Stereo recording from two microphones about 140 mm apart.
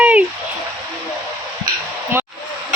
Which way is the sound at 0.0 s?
10° right (ahead or behind).